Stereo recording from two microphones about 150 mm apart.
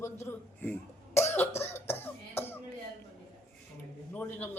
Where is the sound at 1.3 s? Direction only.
15° left (ahead or behind).